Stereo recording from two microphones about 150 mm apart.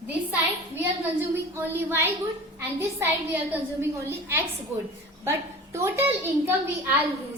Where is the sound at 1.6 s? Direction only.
15° right (ahead or behind).